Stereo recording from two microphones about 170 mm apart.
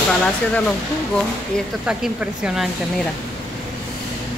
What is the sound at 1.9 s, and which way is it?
Speech, 5° right (ahead or behind).